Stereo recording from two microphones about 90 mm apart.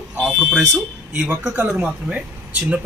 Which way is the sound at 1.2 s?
15° right (ahead or behind).